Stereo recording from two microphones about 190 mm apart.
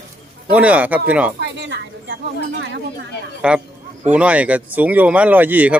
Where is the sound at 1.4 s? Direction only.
65° right (ahead or behind).